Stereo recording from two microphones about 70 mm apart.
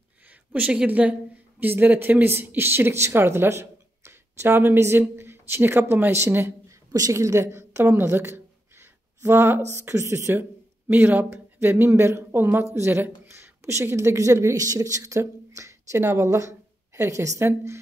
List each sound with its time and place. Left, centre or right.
0.3 s speech: right
6.2 s a woman's voice: right
10.9 s a woman's voice: right